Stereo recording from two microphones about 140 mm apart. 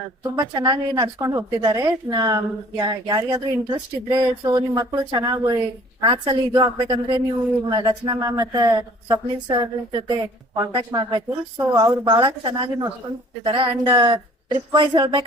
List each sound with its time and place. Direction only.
0.2 s speech: 30° right (ahead or behind)